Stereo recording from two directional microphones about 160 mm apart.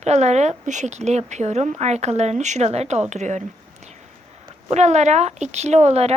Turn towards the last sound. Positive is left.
turn(degrees=-40)  # may be behind; listen again after turning